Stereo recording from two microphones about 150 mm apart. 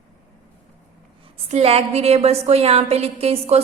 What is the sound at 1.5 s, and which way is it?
A woman's voice, 40° right (ahead or behind).